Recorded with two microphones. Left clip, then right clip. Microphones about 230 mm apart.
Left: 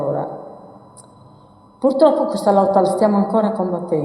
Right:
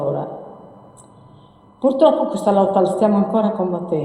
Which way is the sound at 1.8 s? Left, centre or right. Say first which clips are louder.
Even; left.